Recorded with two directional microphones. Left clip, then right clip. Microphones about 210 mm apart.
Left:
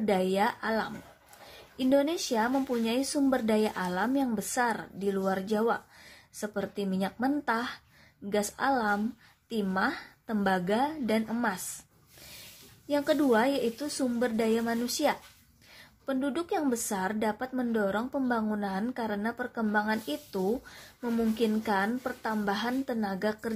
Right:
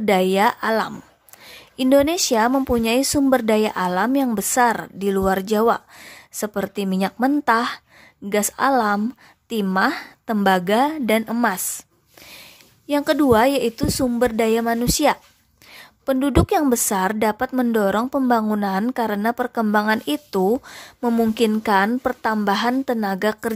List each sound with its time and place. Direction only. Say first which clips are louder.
0.0 s a woman's voice: right 10 dB; 35° right (ahead or behind)
12.8 s a woman's voice: right 9 dB; 35° right (ahead or behind)